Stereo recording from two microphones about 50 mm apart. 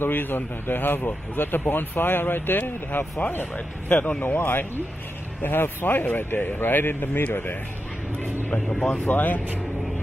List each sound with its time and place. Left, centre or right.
0.0 s speech: left
4.2 s speech: left
4.5 s speech: left
9.0 s speech: left